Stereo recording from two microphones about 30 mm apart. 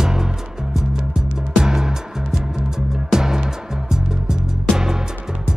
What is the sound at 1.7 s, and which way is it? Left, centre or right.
Music, centre.